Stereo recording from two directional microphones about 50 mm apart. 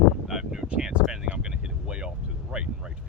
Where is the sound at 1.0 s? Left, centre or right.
Centre.